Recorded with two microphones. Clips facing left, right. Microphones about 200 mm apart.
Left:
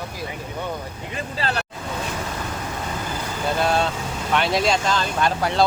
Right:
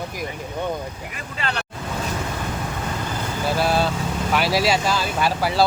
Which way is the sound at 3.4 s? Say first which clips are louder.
Even; 5° right (ahead or behind).